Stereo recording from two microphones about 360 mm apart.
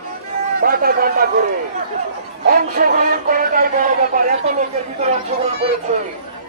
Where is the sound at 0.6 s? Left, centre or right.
Right.